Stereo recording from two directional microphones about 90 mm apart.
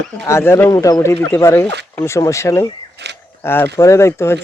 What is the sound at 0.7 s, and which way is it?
Speech, 40° left (ahead or behind).